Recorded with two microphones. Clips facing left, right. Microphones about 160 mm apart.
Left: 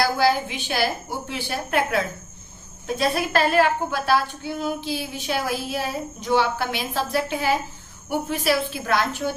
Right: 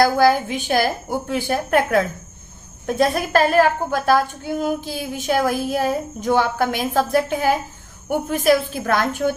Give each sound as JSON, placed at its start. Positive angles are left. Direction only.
{"t": 0.0, "sound": "a woman's voice", "side_deg": -45}